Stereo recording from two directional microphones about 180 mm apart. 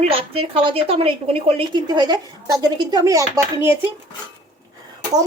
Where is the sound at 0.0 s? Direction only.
30° right (ahead or behind); by 3.9 s 15° right (ahead or behind).